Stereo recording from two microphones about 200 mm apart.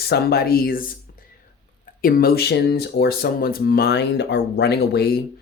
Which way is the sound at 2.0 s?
45° left (ahead or behind).